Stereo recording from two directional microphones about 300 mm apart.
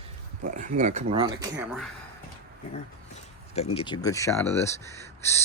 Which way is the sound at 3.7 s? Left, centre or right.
Centre.